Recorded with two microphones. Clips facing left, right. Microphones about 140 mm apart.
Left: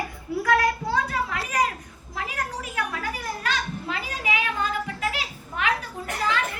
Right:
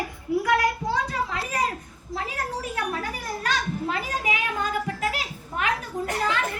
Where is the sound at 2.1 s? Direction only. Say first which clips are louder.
Right 1 dB; 30° right (ahead or behind).